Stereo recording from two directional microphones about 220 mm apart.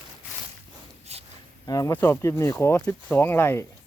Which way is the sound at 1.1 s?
30° right (ahead or behind).